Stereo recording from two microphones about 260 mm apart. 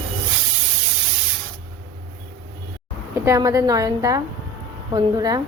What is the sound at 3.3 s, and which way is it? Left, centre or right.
A woman's voice, centre.